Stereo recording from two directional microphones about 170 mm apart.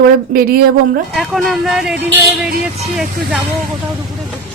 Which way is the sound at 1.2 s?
Centre (ahead or behind).